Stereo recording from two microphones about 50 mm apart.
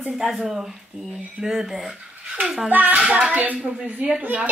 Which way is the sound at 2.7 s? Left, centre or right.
Right.